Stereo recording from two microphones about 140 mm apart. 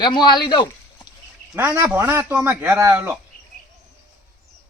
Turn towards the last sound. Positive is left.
turn(degrees=-10)  # may be behind; listen again after turning